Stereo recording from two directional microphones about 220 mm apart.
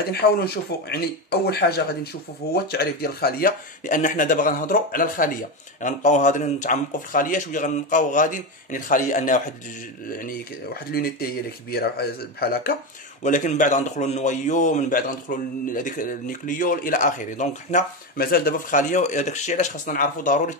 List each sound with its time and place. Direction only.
0.1 s speech: 45° left (ahead or behind)
2.5 s a man's voice: 45° left (ahead or behind)
13.2 s a man's voice: 35° left (ahead or behind)